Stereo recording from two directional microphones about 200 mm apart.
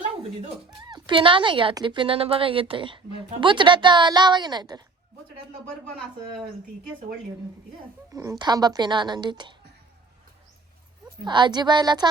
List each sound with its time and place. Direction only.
0.9 s a woman's voice: 25° right (ahead or behind)
8.1 s a woman's voice: 15° right (ahead or behind)
11.2 s a woman's voice: 20° right (ahead or behind)